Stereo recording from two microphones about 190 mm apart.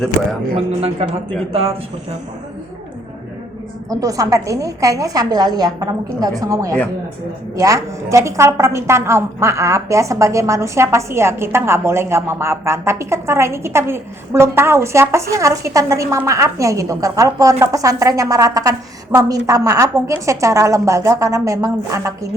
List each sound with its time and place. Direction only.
0.5 s a man's voice: 30° right (ahead or behind)
3.8 s a woman's voice: 20° right (ahead or behind)